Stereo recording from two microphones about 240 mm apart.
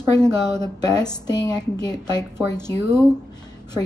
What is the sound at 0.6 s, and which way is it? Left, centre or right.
A woman's voice, centre.